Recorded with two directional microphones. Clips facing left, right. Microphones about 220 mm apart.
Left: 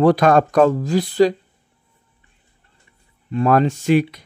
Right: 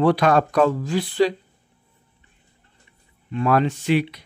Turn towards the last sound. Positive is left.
turn(degrees=45)  # may be behind; listen again after turning